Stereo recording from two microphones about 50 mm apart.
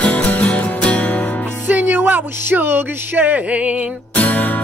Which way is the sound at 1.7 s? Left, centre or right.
Right.